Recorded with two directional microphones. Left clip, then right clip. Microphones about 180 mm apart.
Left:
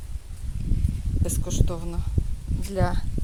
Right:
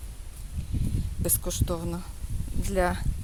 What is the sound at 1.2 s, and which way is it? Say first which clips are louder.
Speech: even; 25° right (ahead or behind).